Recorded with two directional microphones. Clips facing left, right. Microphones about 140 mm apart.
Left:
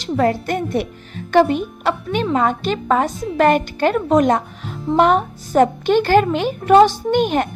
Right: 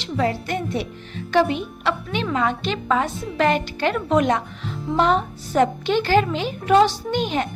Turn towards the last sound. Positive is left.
turn(degrees=55)  # may be behind; listen again after turning